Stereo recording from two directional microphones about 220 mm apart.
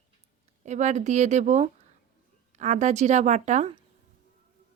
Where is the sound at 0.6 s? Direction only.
30° right (ahead or behind).